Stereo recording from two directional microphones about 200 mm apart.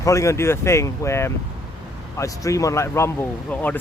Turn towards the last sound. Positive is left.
turn(degrees=10)  # may be behind; listen again after turning